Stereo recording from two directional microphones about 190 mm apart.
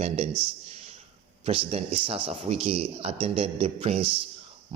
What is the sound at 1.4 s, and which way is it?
Speech, 30° right (ahead or behind).